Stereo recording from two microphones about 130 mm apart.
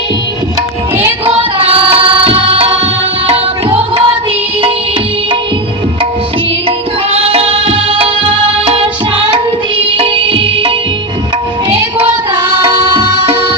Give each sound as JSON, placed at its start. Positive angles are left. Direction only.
{"t": 1.2, "sound": "music", "side_deg": -50}
{"t": 3.3, "sound": "tabla", "side_deg": -50}
{"t": 7.1, "sound": "music", "side_deg": -50}